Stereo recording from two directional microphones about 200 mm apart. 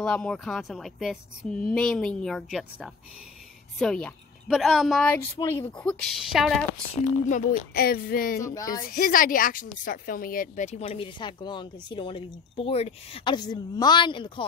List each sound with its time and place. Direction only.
0.0 s a woman's voice: 5° left (ahead or behind)
5.1 s speech: 10° left (ahead or behind)
6.0 s speech: centre (ahead or behind)
7.2 s speech: 45° left (ahead or behind)
8.4 s speech: 15° left (ahead or behind)
8.9 s speech: 45° left (ahead or behind); by 14.4 s 25° left (ahead or behind)